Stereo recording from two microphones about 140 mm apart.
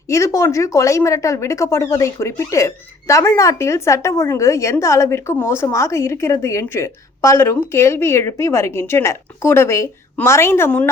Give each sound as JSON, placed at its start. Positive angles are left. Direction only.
{"t": 0.1, "sound": "a woman's voice", "side_deg": 20}